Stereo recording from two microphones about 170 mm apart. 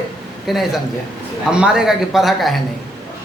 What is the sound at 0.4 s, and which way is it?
A man's voice, centre (ahead or behind).